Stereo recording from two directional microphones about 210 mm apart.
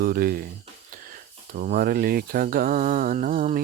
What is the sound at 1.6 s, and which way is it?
Mantra, 40° right (ahead or behind).